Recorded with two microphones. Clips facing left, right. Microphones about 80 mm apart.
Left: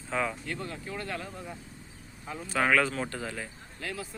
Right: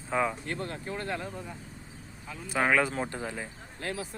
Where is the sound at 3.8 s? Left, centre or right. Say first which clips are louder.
Right 2 dB; right.